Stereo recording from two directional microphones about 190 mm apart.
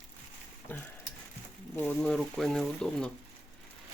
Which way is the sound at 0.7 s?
10° left (ahead or behind).